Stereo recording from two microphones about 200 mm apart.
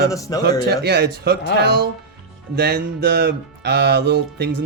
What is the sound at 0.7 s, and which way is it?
Music, 55° right (ahead or behind).